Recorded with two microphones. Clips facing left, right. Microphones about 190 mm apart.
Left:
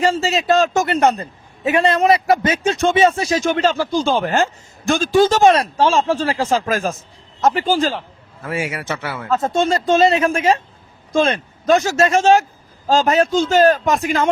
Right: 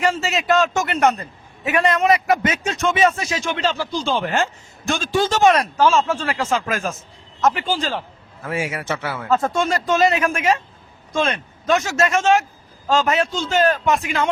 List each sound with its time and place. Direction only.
0.0 s a man's voice: 30° left (ahead or behind)
9.4 s a man's voice: 25° left (ahead or behind)